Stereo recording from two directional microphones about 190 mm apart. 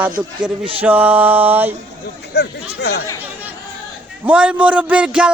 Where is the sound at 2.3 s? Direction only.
60° left (ahead or behind).